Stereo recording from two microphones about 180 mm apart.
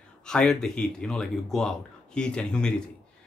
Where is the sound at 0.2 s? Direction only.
5° left (ahead or behind).